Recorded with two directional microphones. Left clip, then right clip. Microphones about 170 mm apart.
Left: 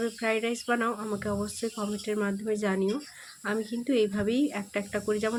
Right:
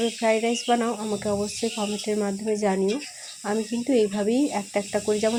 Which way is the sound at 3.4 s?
15° right (ahead or behind).